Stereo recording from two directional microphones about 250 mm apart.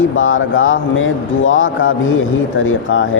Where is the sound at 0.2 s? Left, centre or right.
Left.